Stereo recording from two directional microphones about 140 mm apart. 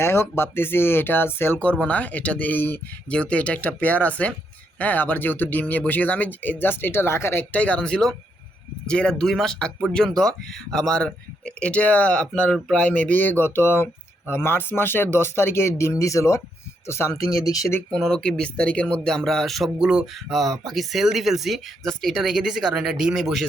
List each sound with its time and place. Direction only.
0.0 s speech: 15° left (ahead or behind)
17.9 s speech: 5° left (ahead or behind)